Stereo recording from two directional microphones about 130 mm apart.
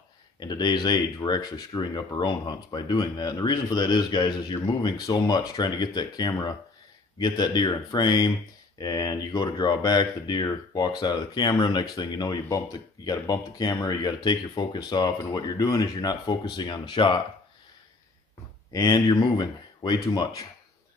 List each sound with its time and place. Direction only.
0.4 s speech: 35° left (ahead or behind)
18.7 s speech: 30° left (ahead or behind)